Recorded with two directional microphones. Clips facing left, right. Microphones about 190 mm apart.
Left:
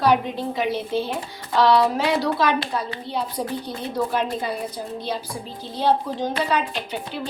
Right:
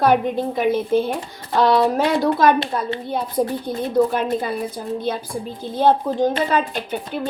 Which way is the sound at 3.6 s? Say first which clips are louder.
Right 8 dB; 50° right (ahead or behind).